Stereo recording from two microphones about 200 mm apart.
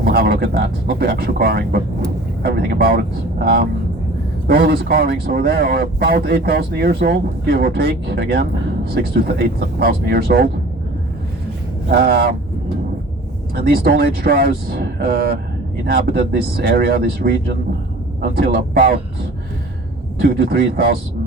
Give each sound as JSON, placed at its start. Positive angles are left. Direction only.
{"t": 0.0, "sound": "speech", "side_deg": -50}
{"t": 11.9, "sound": "speech", "side_deg": -50}
{"t": 13.6, "sound": "speech", "side_deg": -50}
{"t": 20.2, "sound": "speech", "side_deg": -50}